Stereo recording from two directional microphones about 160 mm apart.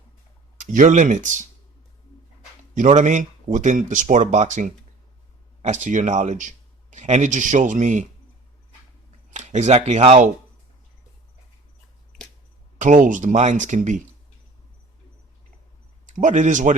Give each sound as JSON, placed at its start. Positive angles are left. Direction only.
{"t": 0.6, "sound": "speech", "side_deg": -50}
{"t": 2.7, "sound": "speech", "side_deg": -50}
{"t": 9.3, "sound": "speech", "side_deg": -45}
{"t": 12.8, "sound": "speech", "side_deg": -55}
{"t": 16.0, "sound": "speech", "side_deg": -50}